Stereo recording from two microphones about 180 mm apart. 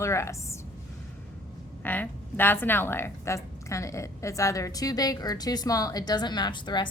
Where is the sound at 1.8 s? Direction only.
10° left (ahead or behind).